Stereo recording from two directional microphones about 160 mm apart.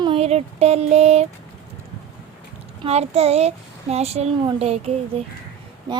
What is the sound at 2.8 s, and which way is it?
A woman's voice, 40° right (ahead or behind).